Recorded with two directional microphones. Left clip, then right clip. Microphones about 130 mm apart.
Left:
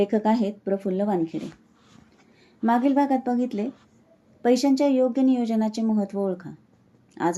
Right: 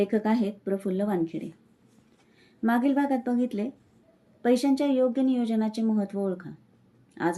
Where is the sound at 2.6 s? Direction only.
25° left (ahead or behind).